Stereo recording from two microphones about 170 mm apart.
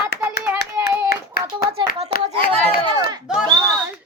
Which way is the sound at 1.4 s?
65° left (ahead or behind).